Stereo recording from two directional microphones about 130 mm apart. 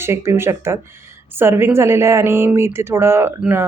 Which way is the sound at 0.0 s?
20° right (ahead or behind).